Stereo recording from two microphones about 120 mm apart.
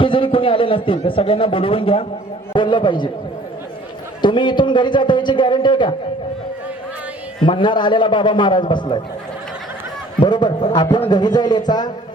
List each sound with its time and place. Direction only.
0.0 s a man's voice: 45° left (ahead or behind)
4.2 s a man's voice: 40° left (ahead or behind)
7.4 s a man's voice: 40° left (ahead or behind)
10.2 s a man's voice: 35° left (ahead or behind)